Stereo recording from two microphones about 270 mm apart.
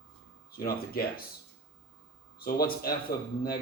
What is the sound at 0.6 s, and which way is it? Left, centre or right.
Speech, left.